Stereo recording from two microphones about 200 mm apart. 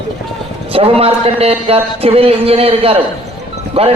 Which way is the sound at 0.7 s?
30° right (ahead or behind).